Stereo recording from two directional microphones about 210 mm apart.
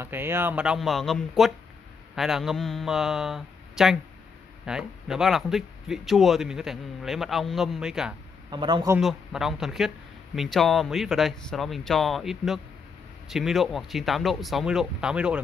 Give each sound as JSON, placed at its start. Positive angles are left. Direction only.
{"t": 0.0, "sound": "speech", "side_deg": -10}
{"t": 8.5, "sound": "speech", "side_deg": -20}
{"t": 8.9, "sound": "speech", "side_deg": 0}